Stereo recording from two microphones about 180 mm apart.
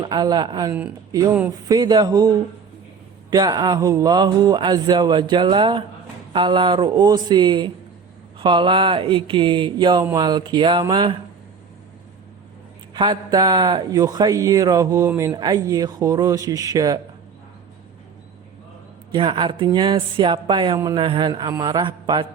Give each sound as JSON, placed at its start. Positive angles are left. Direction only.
{"t": 0.0, "sound": "speech", "side_deg": -20}
{"t": 12.9, "sound": "speech", "side_deg": -25}
{"t": 19.1, "sound": "speech", "side_deg": -25}